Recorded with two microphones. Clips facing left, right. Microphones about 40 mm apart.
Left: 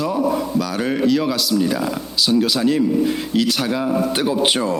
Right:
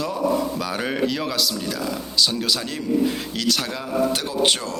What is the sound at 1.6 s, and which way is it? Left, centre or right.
Speech, centre.